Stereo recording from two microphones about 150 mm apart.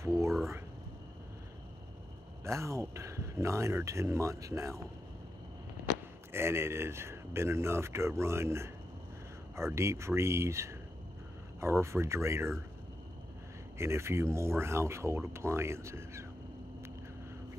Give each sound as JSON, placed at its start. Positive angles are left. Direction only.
{"t": 0.0, "sound": "a sound", "side_deg": -20}
{"t": 2.4, "sound": "speech", "side_deg": -20}
{"t": 6.3, "sound": "speech", "side_deg": -15}
{"t": 13.7, "sound": "speech", "side_deg": -20}